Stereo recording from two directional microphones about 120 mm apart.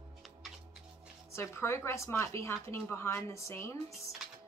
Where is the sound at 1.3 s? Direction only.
20° left (ahead or behind).